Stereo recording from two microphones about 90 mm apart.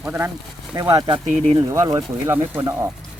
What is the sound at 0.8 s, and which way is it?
Speech, 40° right (ahead or behind).